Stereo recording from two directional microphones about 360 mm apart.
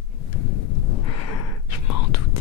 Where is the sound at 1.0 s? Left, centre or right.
Left.